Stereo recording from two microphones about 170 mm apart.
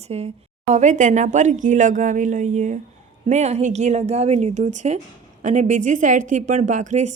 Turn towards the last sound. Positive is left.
turn(degrees=-45)  # may be behind; listen again after turning